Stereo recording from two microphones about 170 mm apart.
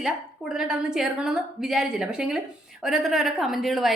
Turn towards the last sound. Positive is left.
turn(degrees=0)  # may be behind; listen again after turning